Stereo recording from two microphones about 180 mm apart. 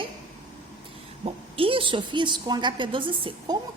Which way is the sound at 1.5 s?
30° right (ahead or behind).